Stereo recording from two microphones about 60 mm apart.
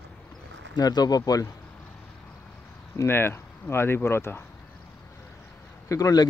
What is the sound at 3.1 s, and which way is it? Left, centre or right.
Speech, left.